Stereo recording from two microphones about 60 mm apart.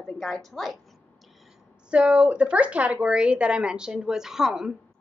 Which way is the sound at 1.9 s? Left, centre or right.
Centre.